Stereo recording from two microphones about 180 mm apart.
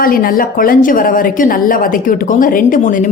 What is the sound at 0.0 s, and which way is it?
A woman's voice, 55° left (ahead or behind).